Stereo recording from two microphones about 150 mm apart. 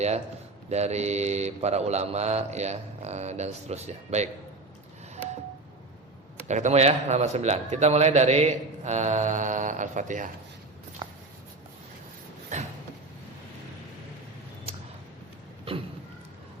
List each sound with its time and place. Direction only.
0.7 s a man's voice: 45° right (ahead or behind)
6.5 s a man's voice: 50° right (ahead or behind)
12.5 s a sound: 50° right (ahead or behind)